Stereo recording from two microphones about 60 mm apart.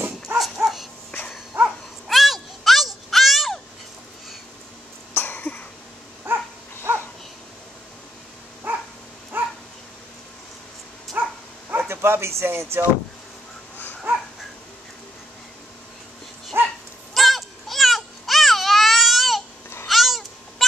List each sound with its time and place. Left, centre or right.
0.6 s dog: right
2.0 s a sound: centre
5.1 s cough: left
6.2 s dog: right
8.7 s dog: right
11.2 s dog: right
11.7 s speech: right
14.1 s dog: right
16.5 s dog: right
17.1 s baby cry: centre
19.9 s cat: centre